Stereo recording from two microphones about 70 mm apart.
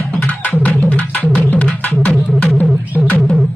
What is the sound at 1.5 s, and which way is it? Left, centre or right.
Music, left.